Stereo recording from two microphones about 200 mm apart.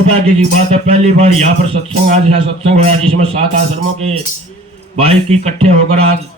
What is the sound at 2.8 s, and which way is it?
Speech, 30° right (ahead or behind).